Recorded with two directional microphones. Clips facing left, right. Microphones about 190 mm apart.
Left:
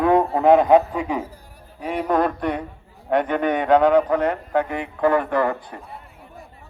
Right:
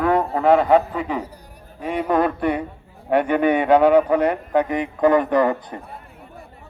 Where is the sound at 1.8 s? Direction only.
Centre (ahead or behind).